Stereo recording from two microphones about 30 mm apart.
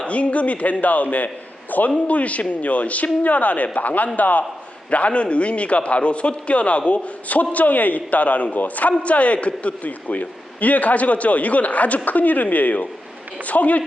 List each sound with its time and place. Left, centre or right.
0.1 s a man's voice: left
1.7 s a man's voice: left
2.0 s a man's voice: left
4.9 s a man's voice: left
7.5 s a man's voice: left